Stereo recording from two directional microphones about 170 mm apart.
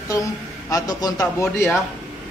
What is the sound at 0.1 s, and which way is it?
A man's voice, 20° left (ahead or behind).